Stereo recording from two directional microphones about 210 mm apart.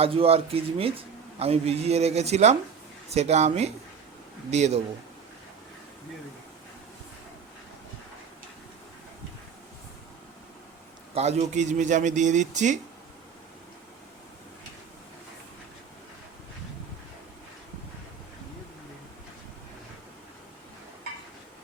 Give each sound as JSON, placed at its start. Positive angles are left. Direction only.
{"t": 0.0, "sound": "a man's voice", "side_deg": -25}
{"t": 11.1, "sound": "a man's voice", "side_deg": -30}